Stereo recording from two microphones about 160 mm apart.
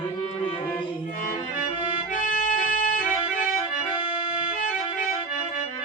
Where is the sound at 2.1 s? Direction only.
50° left (ahead or behind).